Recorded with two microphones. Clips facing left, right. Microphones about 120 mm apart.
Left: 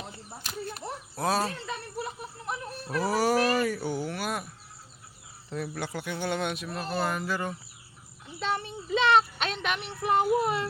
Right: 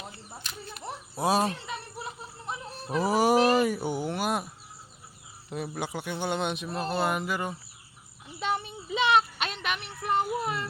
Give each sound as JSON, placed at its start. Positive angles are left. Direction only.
{"t": 1.1, "sound": "speech", "side_deg": -10}
{"t": 2.8, "sound": "speech", "side_deg": -20}
{"t": 5.5, "sound": "speech", "side_deg": -15}
{"t": 6.7, "sound": "a sound", "side_deg": -30}
{"t": 7.0, "sound": "speech", "side_deg": -20}
{"t": 8.4, "sound": "child singing", "side_deg": -10}